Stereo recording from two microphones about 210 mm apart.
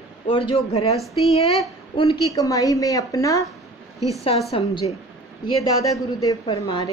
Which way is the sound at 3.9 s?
15° right (ahead or behind).